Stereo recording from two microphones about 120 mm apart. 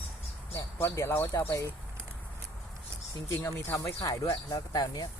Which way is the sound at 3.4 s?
25° left (ahead or behind).